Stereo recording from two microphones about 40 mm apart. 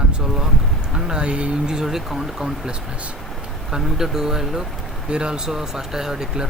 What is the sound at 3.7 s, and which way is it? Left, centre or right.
Speech, centre.